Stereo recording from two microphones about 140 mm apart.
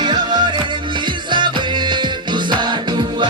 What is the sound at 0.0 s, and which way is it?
Music, 30° right (ahead or behind).